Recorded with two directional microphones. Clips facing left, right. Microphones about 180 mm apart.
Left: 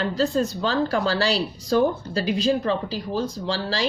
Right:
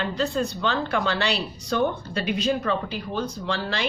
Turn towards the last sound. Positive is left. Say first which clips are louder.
# left 2 dB
turn(degrees=30)  # may be behind; listen again after turning